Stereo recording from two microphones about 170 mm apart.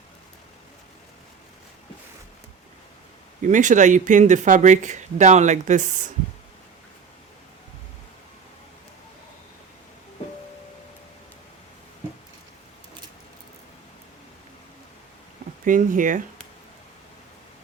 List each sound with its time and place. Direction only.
3.4 s speech: 45° right (ahead or behind)
15.6 s speech: 50° right (ahead or behind)